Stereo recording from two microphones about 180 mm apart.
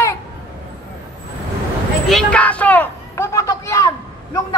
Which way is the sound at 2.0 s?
5° left (ahead or behind).